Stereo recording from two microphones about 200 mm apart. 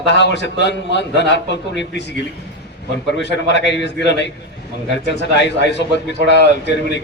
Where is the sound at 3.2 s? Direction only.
60° left (ahead or behind).